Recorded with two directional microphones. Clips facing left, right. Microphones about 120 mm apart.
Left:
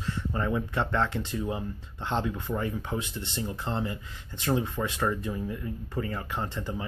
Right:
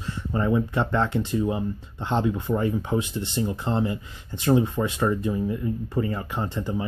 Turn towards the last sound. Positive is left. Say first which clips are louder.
# right 5 dB
turn(degrees=-10)  # may be behind; listen again after turning